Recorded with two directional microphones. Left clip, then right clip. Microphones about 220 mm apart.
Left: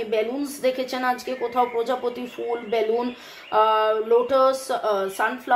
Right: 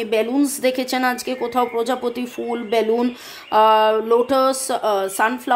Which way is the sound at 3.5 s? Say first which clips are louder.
Right 5 dB; 50° right (ahead or behind).